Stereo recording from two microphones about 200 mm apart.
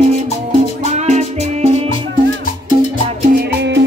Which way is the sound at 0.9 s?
35° right (ahead or behind).